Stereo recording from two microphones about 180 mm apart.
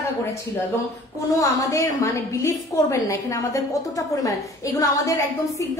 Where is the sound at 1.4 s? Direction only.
20° left (ahead or behind).